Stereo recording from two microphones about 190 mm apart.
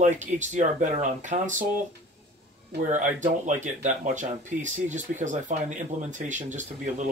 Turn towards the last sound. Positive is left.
turn(degrees=-40)  # may be behind; listen again after turning